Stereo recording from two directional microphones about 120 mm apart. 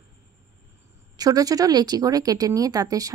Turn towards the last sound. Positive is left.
turn(degrees=-30)  # may be behind; listen again after turning